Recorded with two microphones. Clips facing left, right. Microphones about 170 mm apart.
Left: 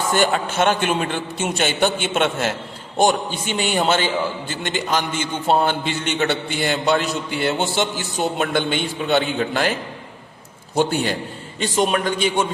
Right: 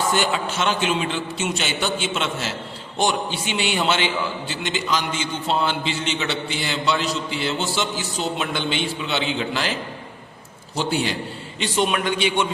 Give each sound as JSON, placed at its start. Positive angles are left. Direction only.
{"t": 0.1, "sound": "a man's voice", "side_deg": 50}
{"t": 10.8, "sound": "a man's voice", "side_deg": 50}